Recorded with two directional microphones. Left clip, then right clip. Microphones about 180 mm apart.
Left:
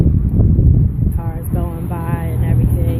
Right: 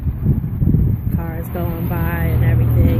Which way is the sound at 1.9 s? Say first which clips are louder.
Right 1 dB; 5° left (ahead or behind).